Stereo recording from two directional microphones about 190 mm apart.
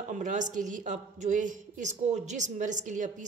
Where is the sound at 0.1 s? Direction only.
40° right (ahead or behind).